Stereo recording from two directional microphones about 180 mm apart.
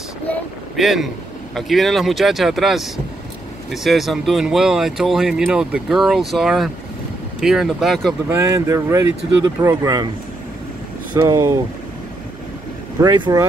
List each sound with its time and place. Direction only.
0.3 s speech: centre (ahead or behind)
8.3 s speech: 15° right (ahead or behind)
11.2 s speech: 15° right (ahead or behind)
13.0 s speech: 25° right (ahead or behind)